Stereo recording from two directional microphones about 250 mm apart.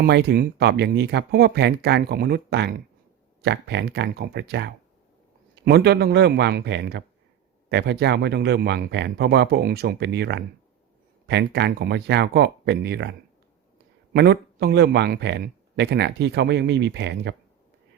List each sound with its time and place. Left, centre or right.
0.0 s speech: right